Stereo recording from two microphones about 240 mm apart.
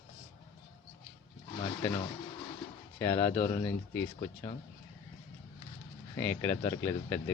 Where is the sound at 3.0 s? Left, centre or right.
Centre.